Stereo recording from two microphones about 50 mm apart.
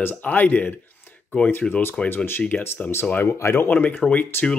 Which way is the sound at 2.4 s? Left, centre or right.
Left.